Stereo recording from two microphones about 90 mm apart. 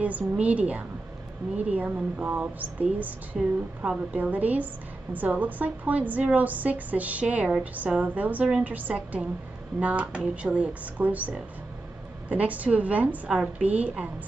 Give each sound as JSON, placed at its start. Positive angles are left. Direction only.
{"t": 0.0, "sound": "a woman's voice", "side_deg": -15}